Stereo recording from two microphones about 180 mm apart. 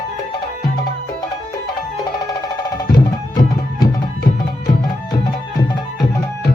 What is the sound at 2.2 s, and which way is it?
Music, 20° left (ahead or behind).